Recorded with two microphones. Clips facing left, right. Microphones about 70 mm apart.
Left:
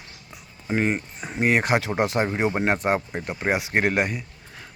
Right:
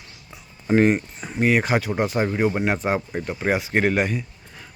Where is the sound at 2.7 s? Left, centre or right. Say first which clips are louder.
Even; centre.